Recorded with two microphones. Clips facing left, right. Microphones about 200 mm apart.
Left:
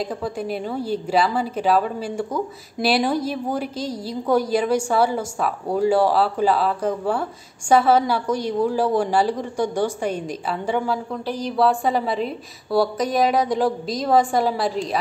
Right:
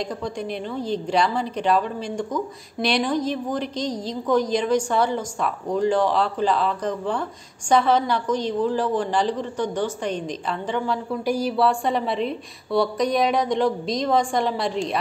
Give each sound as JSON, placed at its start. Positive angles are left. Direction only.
{"t": 0.0, "sound": "a woman's voice", "side_deg": 5}
{"t": 11.2, "sound": "a woman's voice", "side_deg": -10}